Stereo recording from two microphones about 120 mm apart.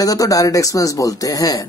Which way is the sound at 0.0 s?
30° left (ahead or behind).